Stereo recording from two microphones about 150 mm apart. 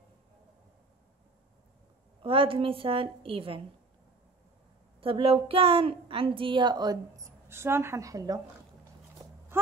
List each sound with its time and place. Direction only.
2.2 s a woman's voice: 35° right (ahead or behind)
5.0 s a woman's voice: 40° right (ahead or behind); by 8.4 s 20° right (ahead or behind)
9.5 s a sound: 15° right (ahead or behind)